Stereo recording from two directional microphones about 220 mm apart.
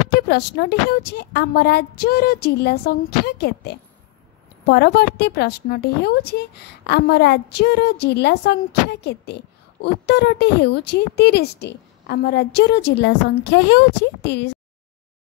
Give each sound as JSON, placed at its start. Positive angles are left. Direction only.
{"t": 0.1, "sound": "a woman's voice", "side_deg": 50}